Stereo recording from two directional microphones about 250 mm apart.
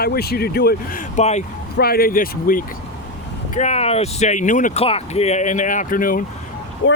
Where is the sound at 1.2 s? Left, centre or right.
Left.